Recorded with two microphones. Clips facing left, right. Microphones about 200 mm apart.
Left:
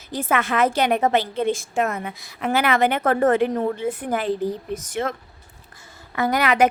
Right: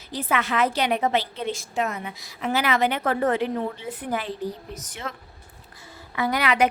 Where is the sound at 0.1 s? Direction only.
50° left (ahead or behind).